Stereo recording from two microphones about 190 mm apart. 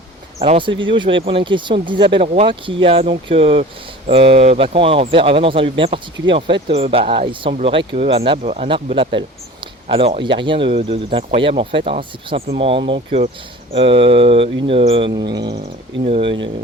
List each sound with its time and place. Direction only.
0.3 s speech: 30° right (ahead or behind)